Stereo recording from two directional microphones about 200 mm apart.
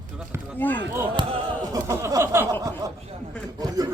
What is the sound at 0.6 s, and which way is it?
Speech, 10° left (ahead or behind).